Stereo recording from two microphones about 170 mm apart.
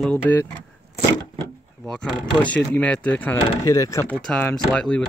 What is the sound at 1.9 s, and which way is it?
Speech, 5° left (ahead or behind).